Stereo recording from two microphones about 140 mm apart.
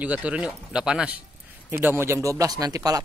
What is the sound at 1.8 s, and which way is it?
Speech, 15° right (ahead or behind).